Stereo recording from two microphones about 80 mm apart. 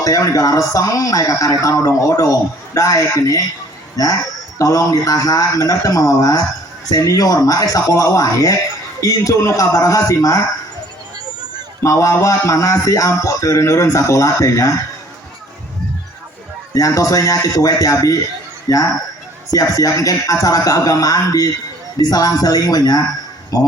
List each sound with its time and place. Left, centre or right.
0.0 s speech: left
11.3 s a sound: right
11.8 s a man's voice: left
16.7 s speech: left